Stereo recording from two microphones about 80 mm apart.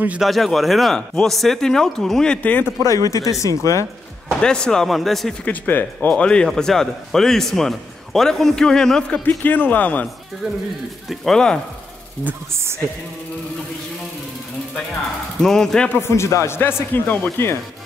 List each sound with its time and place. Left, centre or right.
0.2 s speech: centre; by 2.7 s left
2.8 s speech: left
4.4 s speech: centre
5.4 s speech: left
9.4 s speech: left
11.1 s speech: centre
15.4 s speech: centre
15.9 s speech: left